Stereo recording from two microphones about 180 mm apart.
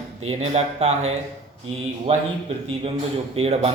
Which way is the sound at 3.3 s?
35° right (ahead or behind).